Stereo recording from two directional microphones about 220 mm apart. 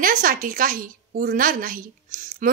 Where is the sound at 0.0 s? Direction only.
40° right (ahead or behind).